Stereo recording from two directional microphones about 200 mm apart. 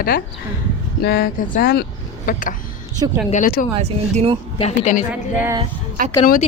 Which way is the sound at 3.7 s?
30° right (ahead or behind).